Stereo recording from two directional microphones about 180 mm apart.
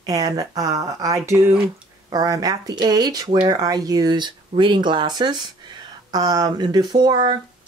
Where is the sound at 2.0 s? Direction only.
20° right (ahead or behind).